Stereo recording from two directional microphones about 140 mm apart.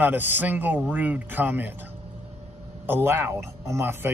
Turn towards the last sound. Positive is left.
turn(degrees=-15)  # may be behind; listen again after turning